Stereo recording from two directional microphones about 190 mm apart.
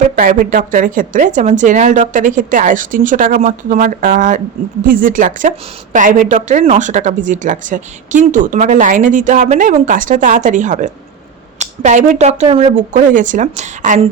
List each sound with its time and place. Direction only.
0.2 s a woman's voice: 45° right (ahead or behind)